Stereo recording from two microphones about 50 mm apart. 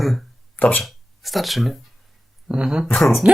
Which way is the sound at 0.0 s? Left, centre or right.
Centre.